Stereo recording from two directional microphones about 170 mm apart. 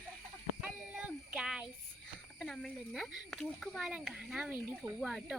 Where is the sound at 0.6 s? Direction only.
5° right (ahead or behind).